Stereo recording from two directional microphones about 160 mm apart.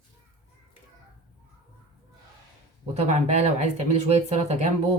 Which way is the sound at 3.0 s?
40° right (ahead or behind).